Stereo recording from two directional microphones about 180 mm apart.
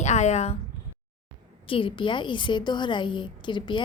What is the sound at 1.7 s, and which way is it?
A woman's voice, 30° left (ahead or behind).